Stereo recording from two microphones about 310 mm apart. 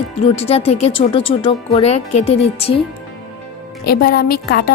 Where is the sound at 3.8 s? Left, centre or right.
Left.